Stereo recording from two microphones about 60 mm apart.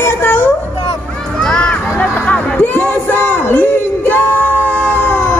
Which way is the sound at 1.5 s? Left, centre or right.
Centre.